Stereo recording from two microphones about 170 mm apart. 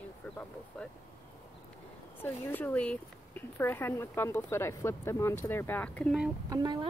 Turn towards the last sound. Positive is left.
turn(degrees=-25)  # may be behind; listen again after turning